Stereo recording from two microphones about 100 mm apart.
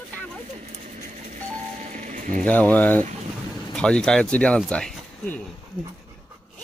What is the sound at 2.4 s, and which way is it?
Speech, 15° left (ahead or behind).